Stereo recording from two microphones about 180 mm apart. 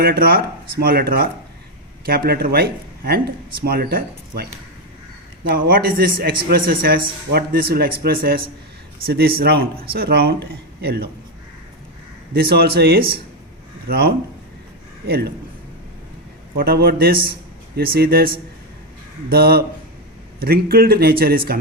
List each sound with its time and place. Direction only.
0.0 s speech: 55° right (ahead or behind)
5.6 s a man's voice: 55° right (ahead or behind)
12.3 s speech: 55° right (ahead or behind)
16.6 s speech: 55° right (ahead or behind)